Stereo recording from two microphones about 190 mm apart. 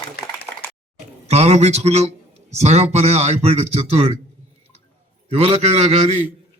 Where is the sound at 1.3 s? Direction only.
35° right (ahead or behind).